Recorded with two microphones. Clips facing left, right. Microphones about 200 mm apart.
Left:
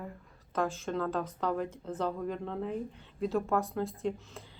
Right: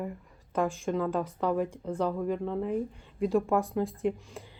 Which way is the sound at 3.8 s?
15° right (ahead or behind).